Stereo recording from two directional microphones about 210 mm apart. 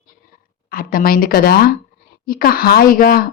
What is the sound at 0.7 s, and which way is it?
A woman's voice, 45° left (ahead or behind).